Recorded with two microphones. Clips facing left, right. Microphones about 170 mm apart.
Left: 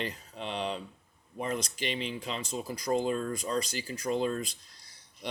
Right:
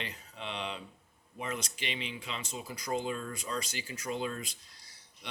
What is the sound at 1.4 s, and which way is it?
Speech, 40° left (ahead or behind).